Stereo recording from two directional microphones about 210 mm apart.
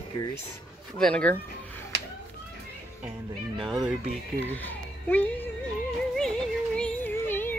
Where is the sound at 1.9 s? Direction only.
55° right (ahead or behind).